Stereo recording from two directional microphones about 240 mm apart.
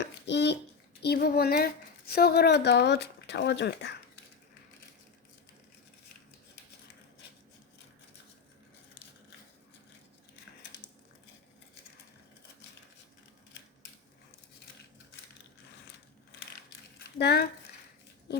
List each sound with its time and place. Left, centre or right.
0.0 s a sound: left
1.0 s a woman's voice: left
17.2 s speech: left